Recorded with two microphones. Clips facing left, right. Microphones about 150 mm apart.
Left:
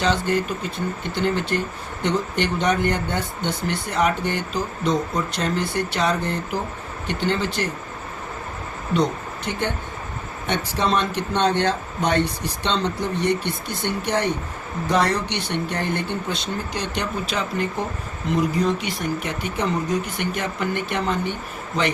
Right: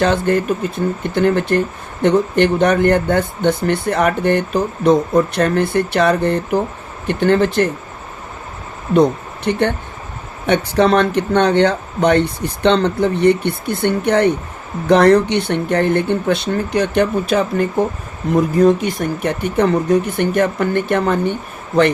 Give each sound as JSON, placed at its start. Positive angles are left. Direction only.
{"t": 0.0, "sound": "speech", "side_deg": -55}
{"t": 9.0, "sound": "speech", "side_deg": -65}
{"t": 10.8, "sound": "speech", "side_deg": -65}